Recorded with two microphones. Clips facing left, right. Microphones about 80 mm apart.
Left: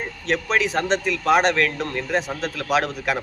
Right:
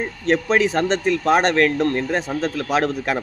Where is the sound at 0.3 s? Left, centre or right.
Right.